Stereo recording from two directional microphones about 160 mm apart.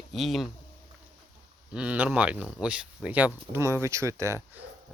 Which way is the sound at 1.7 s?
5° right (ahead or behind).